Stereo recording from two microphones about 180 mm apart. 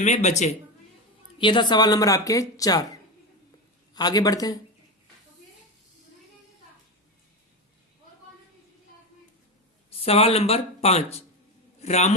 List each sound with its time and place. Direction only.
0.0 s speech: 40° left (ahead or behind)
1.4 s a woman's voice: 25° left (ahead or behind)
3.9 s a woman's voice: 20° left (ahead or behind)
10.0 s speech: 35° left (ahead or behind)